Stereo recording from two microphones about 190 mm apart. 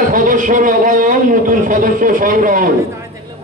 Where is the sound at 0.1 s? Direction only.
45° right (ahead or behind).